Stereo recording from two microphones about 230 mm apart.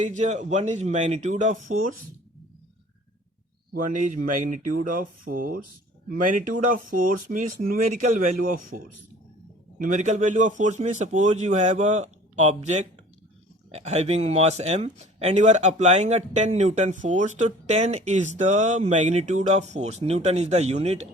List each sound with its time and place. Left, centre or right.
0.0 s speech: right
3.8 s speech: right